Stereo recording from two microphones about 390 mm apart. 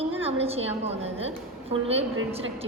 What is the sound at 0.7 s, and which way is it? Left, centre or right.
A woman's voice, centre.